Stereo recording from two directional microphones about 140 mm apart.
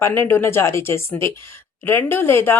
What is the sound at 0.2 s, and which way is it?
Speech, 15° left (ahead or behind).